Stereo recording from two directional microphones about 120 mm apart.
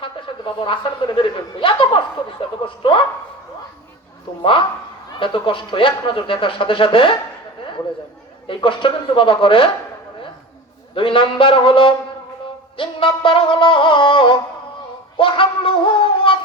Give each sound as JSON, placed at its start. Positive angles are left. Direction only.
{"t": 0.0, "sound": "speech", "side_deg": 45}
{"t": 5.2, "sound": "speech", "side_deg": 45}
{"t": 8.4, "sound": "speech", "side_deg": 45}
{"t": 10.9, "sound": "speech", "side_deg": 45}
{"t": 15.2, "sound": "a sound", "side_deg": 45}